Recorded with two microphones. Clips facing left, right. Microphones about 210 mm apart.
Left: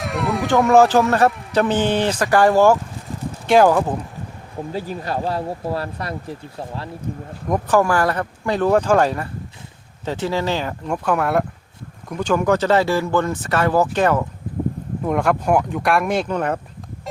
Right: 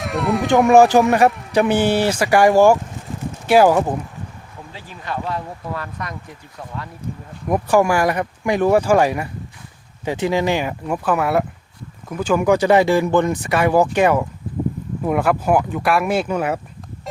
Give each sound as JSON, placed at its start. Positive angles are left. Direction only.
{"t": 0.0, "sound": "speech", "side_deg": 0}
{"t": 0.7, "sound": "speech", "side_deg": -15}
{"t": 4.7, "sound": "speech", "side_deg": 40}
{"t": 7.4, "sound": "speech", "side_deg": -10}